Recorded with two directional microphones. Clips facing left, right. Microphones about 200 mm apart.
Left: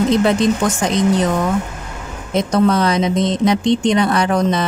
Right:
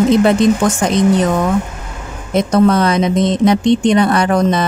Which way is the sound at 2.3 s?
50° right (ahead or behind).